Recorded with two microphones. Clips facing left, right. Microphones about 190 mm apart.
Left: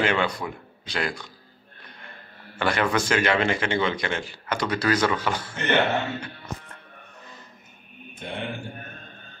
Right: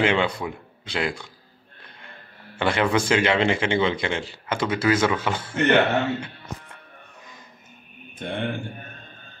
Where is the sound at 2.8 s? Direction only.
10° right (ahead or behind).